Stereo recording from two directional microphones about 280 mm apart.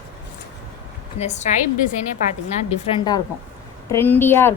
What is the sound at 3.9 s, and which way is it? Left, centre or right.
Speech, centre.